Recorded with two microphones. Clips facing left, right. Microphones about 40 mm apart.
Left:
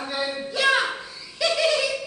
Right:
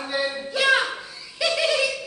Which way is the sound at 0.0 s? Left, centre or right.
Centre.